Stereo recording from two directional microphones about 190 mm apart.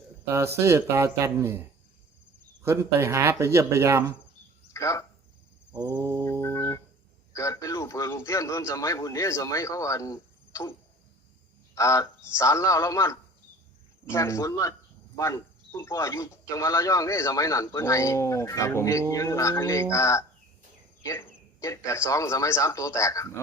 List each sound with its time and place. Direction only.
0.3 s speech: 15° right (ahead or behind)
2.6 s speech: 15° right (ahead or behind)
4.7 s a sound: 15° left (ahead or behind)
5.7 s mantra: 20° right (ahead or behind)
6.4 s a sound: 15° left (ahead or behind)
7.3 s a man's voice: 15° left (ahead or behind)